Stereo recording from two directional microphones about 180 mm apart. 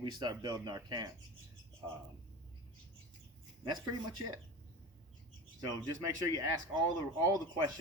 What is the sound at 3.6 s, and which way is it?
Speech, 20° right (ahead or behind).